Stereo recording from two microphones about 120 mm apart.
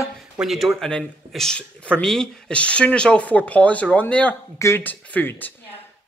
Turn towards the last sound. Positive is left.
turn(degrees=15)  # may be behind; listen again after turning